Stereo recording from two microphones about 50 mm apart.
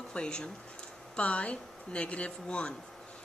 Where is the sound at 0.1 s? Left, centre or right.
Centre.